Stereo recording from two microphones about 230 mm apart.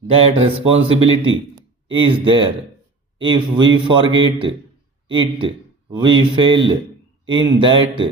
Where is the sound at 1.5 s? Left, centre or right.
Right.